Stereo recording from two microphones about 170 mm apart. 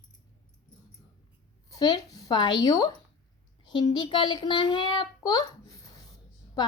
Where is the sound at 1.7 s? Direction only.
25° left (ahead or behind).